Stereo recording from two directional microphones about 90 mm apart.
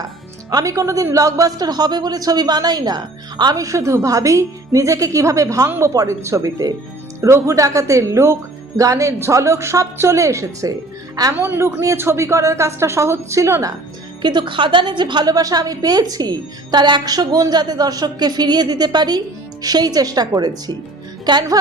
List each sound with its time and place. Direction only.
0.5 s speech: 35° right (ahead or behind)
5.6 s speech: 25° right (ahead or behind)
5.9 s speech: 35° right (ahead or behind)
11.3 s speech: 30° right (ahead or behind)
14.2 s a woman's voice: 60° right (ahead or behind)